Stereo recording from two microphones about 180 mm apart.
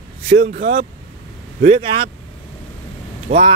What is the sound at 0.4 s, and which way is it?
Speech, 60° right (ahead or behind).